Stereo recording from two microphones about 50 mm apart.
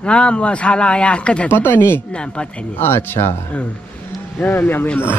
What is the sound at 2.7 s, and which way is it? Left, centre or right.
Speech, left.